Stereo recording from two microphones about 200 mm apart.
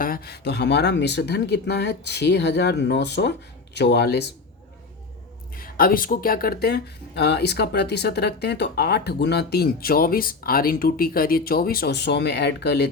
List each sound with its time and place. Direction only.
0.0 s speech: 50° left (ahead or behind)
5.5 s speech: 45° left (ahead or behind)